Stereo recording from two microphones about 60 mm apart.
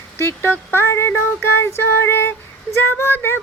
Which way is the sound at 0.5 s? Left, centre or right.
Left.